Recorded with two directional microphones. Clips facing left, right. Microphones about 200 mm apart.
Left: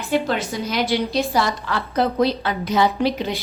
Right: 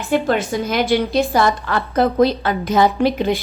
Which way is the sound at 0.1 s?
50° right (ahead or behind).